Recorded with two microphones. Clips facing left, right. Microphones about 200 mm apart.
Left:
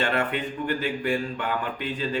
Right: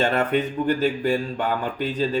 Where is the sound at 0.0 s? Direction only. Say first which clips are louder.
Right 5 dB; 45° right (ahead or behind).